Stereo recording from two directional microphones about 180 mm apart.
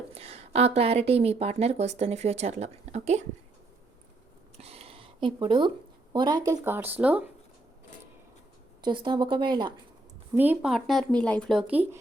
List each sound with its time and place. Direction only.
0.1 s a woman's voice: 35° right (ahead or behind)
4.6 s a sound: 35° right (ahead or behind)
6.1 s speech: 25° right (ahead or behind)
8.8 s speech: 25° right (ahead or behind)
10.3 s speech: 10° right (ahead or behind)